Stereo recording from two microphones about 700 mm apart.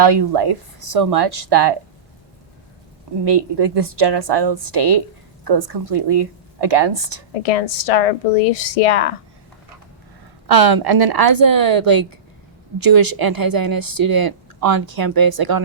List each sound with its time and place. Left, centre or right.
0.0 s a woman's voice: right
3.2 s a woman's voice: right
7.4 s a woman's voice: left
10.5 s a woman's voice: right